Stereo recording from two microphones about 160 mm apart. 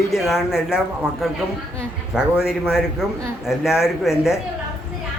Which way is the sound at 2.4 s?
5° right (ahead or behind).